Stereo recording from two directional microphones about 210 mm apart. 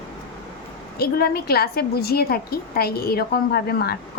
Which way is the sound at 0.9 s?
45° left (ahead or behind).